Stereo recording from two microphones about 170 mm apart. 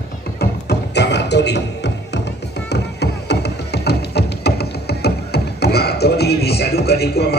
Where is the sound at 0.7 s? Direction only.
90° left.